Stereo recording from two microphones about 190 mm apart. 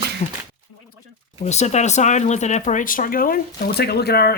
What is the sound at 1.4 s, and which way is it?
Speech, 35° left (ahead or behind).